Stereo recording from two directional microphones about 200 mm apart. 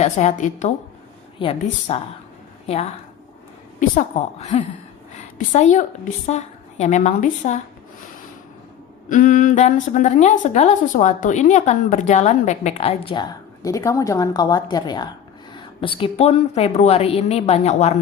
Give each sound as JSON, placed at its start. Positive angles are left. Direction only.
{"t": 0.0, "sound": "a woman's voice", "side_deg": 35}
{"t": 9.0, "sound": "a woman's voice", "side_deg": 40}